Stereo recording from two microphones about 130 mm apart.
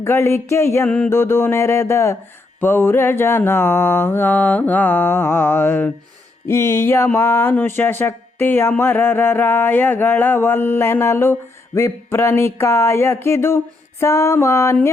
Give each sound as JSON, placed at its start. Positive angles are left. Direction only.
{"t": 0.0, "sound": "speech", "side_deg": 20}
{"t": 0.9, "sound": "speech", "side_deg": 10}
{"t": 1.1, "sound": "speech", "side_deg": 20}